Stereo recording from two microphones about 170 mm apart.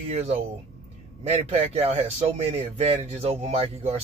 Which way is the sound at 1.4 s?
35° right (ahead or behind).